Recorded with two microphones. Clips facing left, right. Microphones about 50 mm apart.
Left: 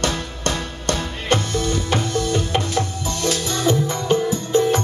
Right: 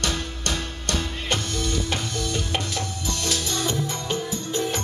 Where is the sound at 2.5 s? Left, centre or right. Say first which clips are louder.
Left 6 dB; left.